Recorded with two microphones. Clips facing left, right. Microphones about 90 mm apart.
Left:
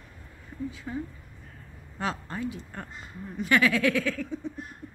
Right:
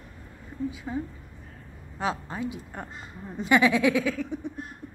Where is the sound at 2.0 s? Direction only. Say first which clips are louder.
Right 2 dB; 15° right (ahead or behind).